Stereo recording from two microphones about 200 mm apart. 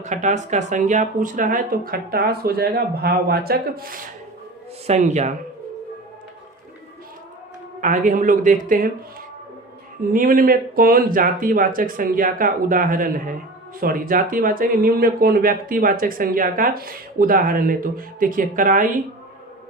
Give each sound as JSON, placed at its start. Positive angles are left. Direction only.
{"t": 0.0, "sound": "speech", "side_deg": -35}
{"t": 4.9, "sound": "a man's voice", "side_deg": -35}
{"t": 7.8, "sound": "a man's voice", "side_deg": -40}
{"t": 10.1, "sound": "speech", "side_deg": -45}